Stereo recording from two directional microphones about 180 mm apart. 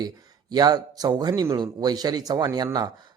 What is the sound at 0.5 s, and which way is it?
Speech, 20° right (ahead or behind).